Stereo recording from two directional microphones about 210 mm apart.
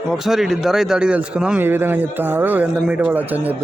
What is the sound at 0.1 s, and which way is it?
Speech, centre (ahead or behind).